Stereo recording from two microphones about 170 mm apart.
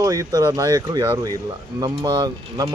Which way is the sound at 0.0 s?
20° right (ahead or behind).